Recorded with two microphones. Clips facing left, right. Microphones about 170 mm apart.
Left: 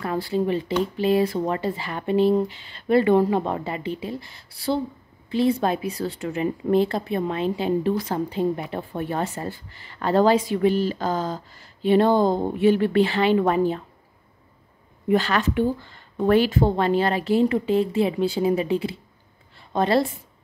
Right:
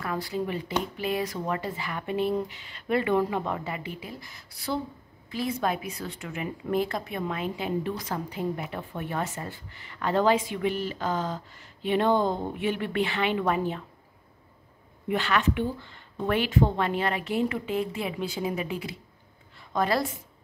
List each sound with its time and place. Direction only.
0.0 s speech: 30° left (ahead or behind)
15.0 s a woman's voice: 35° left (ahead or behind)